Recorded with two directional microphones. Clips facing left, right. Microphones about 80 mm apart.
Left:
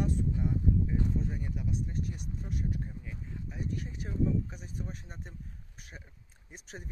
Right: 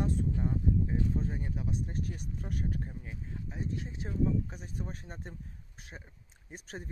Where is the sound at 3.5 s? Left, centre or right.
Right.